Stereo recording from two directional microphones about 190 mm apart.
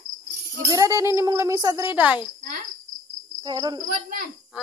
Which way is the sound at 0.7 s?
15° right (ahead or behind).